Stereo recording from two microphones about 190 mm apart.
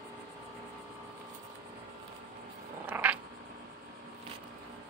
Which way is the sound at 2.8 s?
10° right (ahead or behind).